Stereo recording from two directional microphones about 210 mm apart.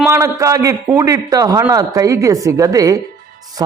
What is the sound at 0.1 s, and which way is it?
A man's voice, 15° right (ahead or behind).